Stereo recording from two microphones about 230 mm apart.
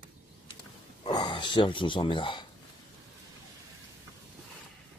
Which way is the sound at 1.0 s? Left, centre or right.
Centre.